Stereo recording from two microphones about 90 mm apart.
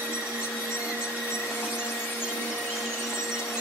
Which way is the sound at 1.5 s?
20° left (ahead or behind).